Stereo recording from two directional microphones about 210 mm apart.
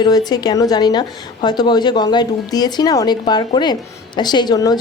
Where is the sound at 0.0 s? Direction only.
20° left (ahead or behind).